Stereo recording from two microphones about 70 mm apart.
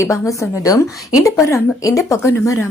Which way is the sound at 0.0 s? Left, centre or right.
Left.